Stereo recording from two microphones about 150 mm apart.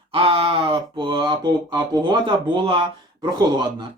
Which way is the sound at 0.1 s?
40° right (ahead or behind).